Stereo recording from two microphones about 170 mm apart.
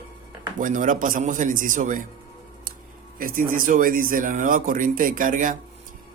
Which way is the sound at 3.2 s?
55° right (ahead or behind).